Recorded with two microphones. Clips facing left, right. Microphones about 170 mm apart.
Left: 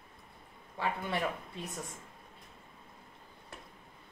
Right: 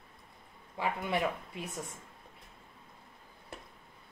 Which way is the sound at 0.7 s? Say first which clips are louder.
Right 2 dB; 15° right (ahead or behind).